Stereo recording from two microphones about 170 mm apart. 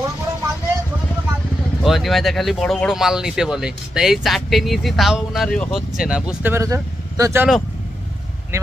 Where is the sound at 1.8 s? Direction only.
Centre (ahead or behind); by 7.4 s 20° right (ahead or behind).